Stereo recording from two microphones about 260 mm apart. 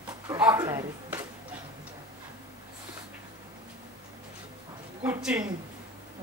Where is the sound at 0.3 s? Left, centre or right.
Centre.